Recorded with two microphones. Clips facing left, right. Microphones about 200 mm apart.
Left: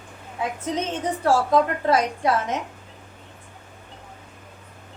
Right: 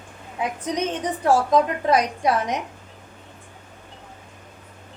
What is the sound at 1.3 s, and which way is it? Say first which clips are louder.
A woman's voice: right 1 dB; 15° right (ahead or behind).